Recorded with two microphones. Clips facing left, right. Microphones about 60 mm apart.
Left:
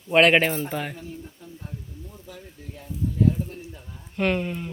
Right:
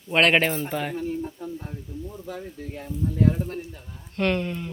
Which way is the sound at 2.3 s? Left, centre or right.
Right.